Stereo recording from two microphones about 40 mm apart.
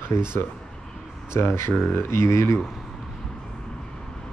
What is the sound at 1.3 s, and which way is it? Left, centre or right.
Speech, left.